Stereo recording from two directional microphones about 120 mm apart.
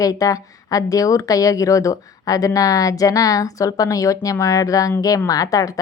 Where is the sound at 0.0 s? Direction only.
30° left (ahead or behind).